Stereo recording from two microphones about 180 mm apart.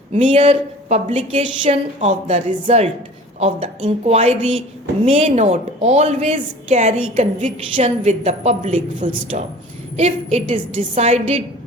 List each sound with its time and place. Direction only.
0.1 s a woman's voice: 35° right (ahead or behind)